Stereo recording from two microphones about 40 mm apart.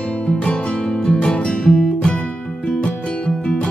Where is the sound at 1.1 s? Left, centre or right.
Left.